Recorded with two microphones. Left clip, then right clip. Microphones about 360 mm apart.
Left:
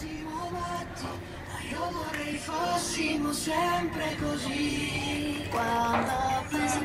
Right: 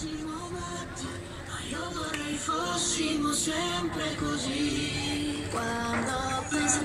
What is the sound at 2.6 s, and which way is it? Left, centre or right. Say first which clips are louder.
Music: left 5 dB; left.